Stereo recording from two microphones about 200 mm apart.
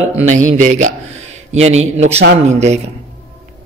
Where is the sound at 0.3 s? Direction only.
40° right (ahead or behind).